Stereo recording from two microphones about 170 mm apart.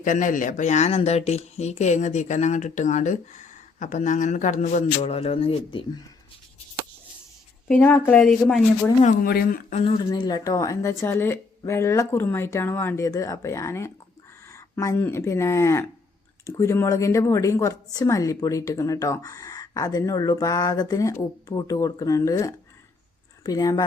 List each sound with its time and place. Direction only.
0.0 s speech: 50° left (ahead or behind); by 6.0 s 30° left (ahead or behind)
7.7 s speech: 10° left (ahead or behind)
9.0 s speech: 55° left (ahead or behind)
10.1 s a woman's voice: 20° left (ahead or behind)